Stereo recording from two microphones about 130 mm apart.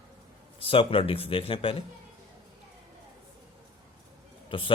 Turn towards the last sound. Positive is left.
turn(degrees=40)  # may be behind; listen again after turning